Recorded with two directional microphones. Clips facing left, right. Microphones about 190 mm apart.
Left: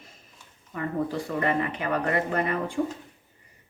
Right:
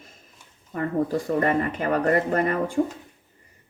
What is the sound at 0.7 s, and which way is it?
Speech, 45° right (ahead or behind).